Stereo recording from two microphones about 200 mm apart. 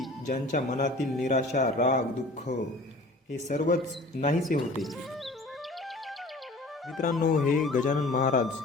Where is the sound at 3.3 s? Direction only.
40° left (ahead or behind).